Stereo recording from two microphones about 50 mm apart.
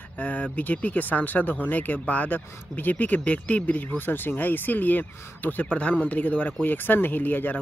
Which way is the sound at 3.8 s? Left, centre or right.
Left.